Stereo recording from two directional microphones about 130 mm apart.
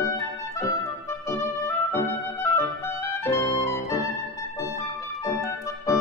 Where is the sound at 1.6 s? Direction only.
15° left (ahead or behind).